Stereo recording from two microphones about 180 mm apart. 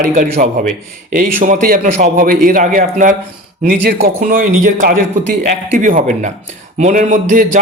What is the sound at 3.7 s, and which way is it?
Speech, 65° right (ahead or behind).